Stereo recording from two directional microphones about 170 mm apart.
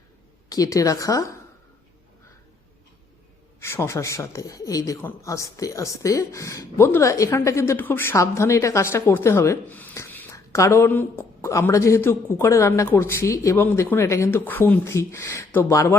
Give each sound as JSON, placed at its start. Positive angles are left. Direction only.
{"t": 0.5, "sound": "a woman's voice", "side_deg": 20}
{"t": 3.6, "sound": "a woman's voice", "side_deg": 15}